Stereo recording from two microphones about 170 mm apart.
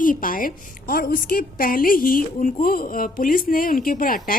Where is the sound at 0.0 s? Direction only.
55° left (ahead or behind).